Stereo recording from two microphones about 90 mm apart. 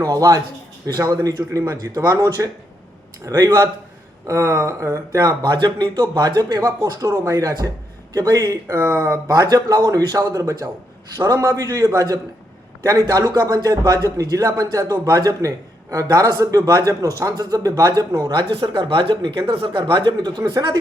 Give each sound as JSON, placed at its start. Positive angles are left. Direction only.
{"t": 0.0, "sound": "a man's voice", "side_deg": -40}
{"t": 4.3, "sound": "speech", "side_deg": -35}
{"t": 5.4, "sound": "a man's voice", "side_deg": -50}
{"t": 8.6, "sound": "speech", "side_deg": -30}
{"t": 9.2, "sound": "a man's voice", "side_deg": -45}